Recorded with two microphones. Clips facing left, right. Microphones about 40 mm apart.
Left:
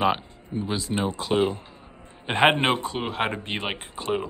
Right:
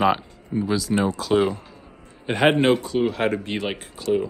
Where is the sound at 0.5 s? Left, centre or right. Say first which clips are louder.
Right 5 dB; left.